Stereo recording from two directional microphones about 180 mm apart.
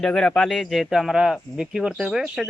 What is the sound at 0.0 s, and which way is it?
Speech, 5° left (ahead or behind).